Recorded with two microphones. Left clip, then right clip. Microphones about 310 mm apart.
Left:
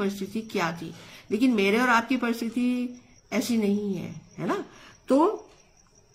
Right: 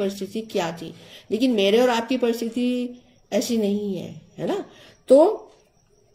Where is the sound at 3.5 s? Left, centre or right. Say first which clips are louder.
Right 3 dB; left.